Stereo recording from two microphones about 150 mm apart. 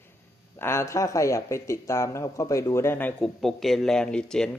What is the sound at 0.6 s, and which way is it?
Speech, 15° left (ahead or behind).